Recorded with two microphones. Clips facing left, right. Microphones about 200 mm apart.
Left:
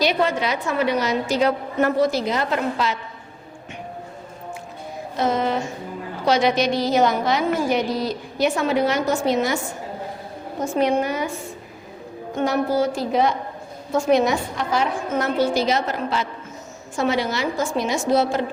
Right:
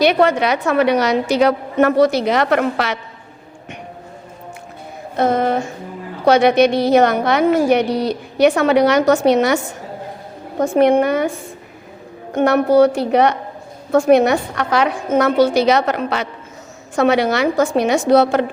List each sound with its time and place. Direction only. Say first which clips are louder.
0.0 s a woman's voice: right 7 dB; 65° right (ahead or behind)
5.1 s a woman's voice: right 5 dB; 55° right (ahead or behind); by 9.6 s 70° right (ahead or behind)
10.6 s a woman's voice: right 7 dB; 60° right (ahead or behind)
12.3 s a woman's voice: right 8 dB; 65° right (ahead or behind)